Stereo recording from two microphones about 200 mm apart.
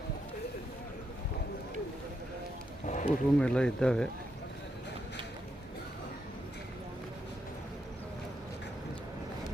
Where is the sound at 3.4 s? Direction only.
5° left (ahead or behind).